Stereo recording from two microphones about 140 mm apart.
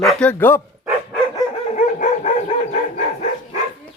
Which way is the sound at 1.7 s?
60° left (ahead or behind).